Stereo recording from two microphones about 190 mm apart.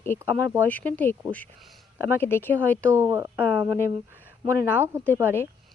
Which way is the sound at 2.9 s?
15° right (ahead or behind).